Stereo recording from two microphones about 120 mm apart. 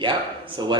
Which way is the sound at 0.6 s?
40° right (ahead or behind).